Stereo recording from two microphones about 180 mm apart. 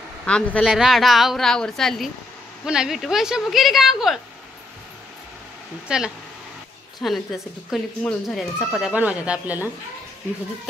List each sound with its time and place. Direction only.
0.2 s speech: 5° left (ahead or behind)
5.9 s speech: 5° right (ahead or behind)